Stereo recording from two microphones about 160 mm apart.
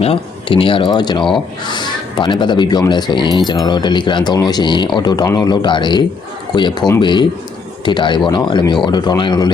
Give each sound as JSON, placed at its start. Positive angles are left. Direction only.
{"t": 0.0, "sound": "speech", "side_deg": 35}